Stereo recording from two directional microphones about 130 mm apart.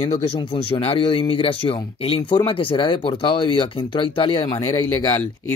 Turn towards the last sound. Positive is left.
turn(degrees=30)  # may be behind; listen again after turning